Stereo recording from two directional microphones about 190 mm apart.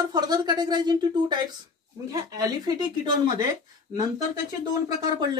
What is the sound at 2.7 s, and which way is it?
Speech, 20° right (ahead or behind).